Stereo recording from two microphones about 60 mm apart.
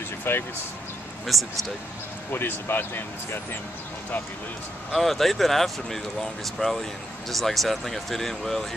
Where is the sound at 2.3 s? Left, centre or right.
Left.